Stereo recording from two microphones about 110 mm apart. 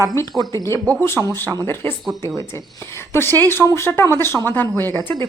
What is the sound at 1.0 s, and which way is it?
Speech, 25° left (ahead or behind).